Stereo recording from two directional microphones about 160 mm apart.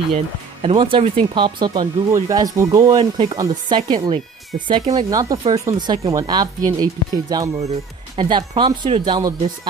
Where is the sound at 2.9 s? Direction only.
35° right (ahead or behind).